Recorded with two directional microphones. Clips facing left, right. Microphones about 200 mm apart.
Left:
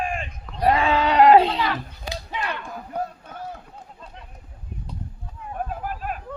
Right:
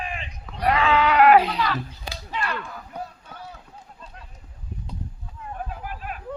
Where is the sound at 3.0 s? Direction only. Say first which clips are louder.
Left 6 dB; 50° left (ahead or behind).